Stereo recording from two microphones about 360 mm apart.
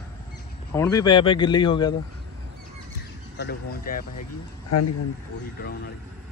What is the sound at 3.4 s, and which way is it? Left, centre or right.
Speech, left.